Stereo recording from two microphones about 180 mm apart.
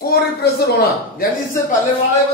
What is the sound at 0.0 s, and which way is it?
A man's voice, 60° left (ahead or behind).